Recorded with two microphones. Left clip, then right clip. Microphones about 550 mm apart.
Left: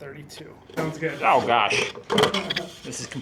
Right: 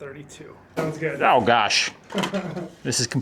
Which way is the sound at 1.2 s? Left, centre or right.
Right.